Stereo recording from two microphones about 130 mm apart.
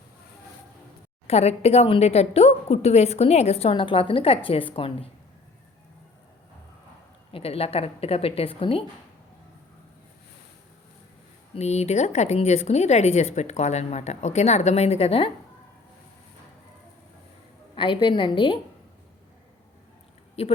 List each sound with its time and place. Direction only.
1.3 s a woman's voice: 55° left (ahead or behind)
7.3 s a woman's voice: 50° left (ahead or behind)
11.5 s a woman's voice: 60° left (ahead or behind)
17.7 s a woman's voice: 40° left (ahead or behind)
20.4 s a woman's voice: 50° left (ahead or behind)